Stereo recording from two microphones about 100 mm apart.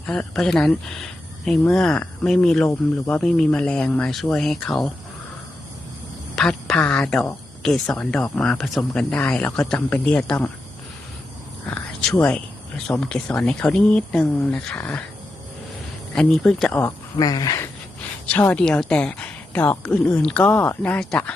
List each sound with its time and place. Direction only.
0.0 s speech: 10° left (ahead or behind)
6.3 s a woman's voice: 5° left (ahead or behind)
9.1 s speech: 15° left (ahead or behind)
11.7 s a sound: 5° left (ahead or behind)
12.2 s speech: 15° left (ahead or behind)
16.1 s speech: 5° left (ahead or behind)
16.8 s speech: 40° left (ahead or behind)
18.3 s speech: 15° left (ahead or behind)